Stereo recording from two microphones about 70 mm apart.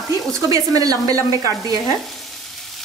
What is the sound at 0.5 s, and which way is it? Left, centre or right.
Speech, right.